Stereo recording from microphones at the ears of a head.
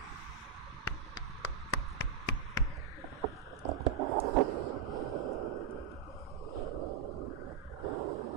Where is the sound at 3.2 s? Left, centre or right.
Right.